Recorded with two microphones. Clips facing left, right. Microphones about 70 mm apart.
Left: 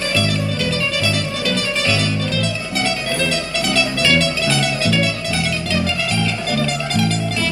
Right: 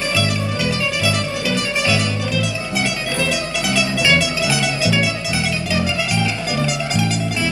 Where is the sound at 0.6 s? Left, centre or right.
Centre.